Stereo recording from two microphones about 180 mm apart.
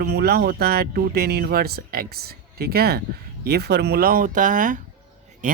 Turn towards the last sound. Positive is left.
turn(degrees=-45)  # may be behind; listen again after turning